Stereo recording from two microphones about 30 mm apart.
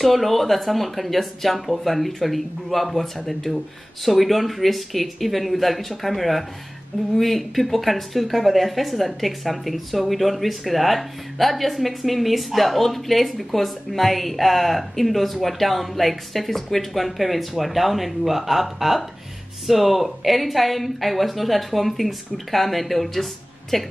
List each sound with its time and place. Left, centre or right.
0.0 s a woman's voice: centre